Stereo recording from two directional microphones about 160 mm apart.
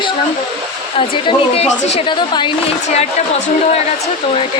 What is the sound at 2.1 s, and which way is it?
Speech, 30° left (ahead or behind).